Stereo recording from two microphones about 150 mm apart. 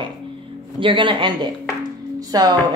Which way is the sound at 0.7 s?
35° right (ahead or behind).